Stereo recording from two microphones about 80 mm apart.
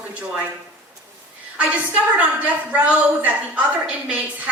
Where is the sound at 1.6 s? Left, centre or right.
Centre.